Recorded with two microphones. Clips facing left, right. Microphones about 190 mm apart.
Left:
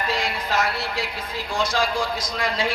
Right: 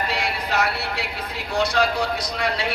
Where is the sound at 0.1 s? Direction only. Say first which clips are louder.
Even; 65° right (ahead or behind).